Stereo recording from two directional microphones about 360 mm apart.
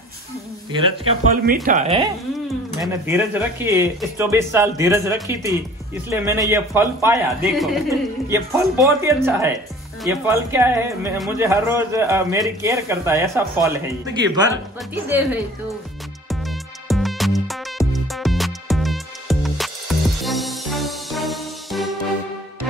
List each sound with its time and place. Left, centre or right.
0.7 s speech: centre
1.3 s speech: right
2.8 s speech: centre
16.3 s music: centre